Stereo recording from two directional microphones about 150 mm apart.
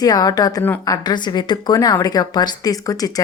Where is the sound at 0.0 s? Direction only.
25° left (ahead or behind).